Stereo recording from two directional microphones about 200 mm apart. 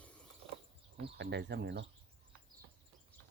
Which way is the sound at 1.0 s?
60° right (ahead or behind).